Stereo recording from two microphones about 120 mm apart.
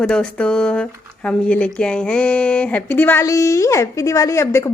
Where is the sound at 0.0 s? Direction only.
5° left (ahead or behind).